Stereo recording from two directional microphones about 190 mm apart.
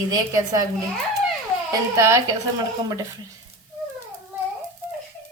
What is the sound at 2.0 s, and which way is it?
Speech, 15° right (ahead or behind).